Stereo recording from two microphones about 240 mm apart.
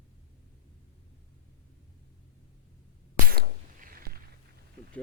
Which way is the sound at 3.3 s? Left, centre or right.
Right.